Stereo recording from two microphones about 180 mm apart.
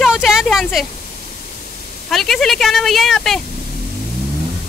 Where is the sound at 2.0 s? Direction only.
Centre (ahead or behind).